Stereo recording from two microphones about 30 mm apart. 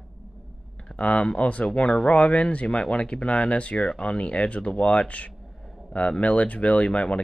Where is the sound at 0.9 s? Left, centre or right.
Left.